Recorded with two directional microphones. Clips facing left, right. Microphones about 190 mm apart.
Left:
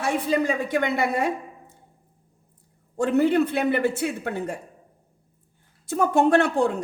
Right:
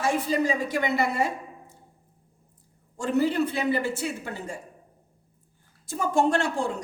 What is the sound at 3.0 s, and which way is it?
A man's voice, 60° left (ahead or behind).